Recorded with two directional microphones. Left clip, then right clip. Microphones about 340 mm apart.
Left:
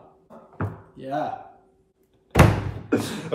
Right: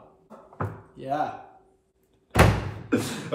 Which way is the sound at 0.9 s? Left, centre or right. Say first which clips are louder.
Even; centre.